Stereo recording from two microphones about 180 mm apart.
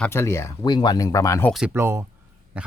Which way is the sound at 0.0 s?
15° left (ahead or behind).